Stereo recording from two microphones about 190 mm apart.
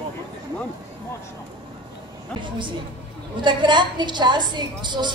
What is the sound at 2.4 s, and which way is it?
A woman's voice, 25° right (ahead or behind).